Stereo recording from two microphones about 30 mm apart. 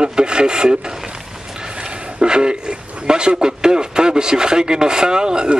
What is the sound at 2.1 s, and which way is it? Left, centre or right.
Speech, right.